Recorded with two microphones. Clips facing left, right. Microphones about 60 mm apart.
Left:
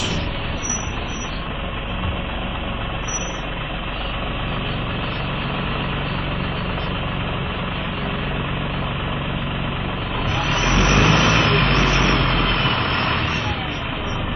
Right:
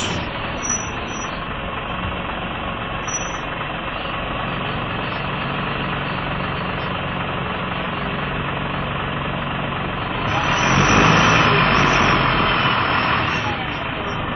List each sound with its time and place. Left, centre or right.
10.4 s vehicle: centre
11.7 s vehicle: right
12.1 s vehicle: centre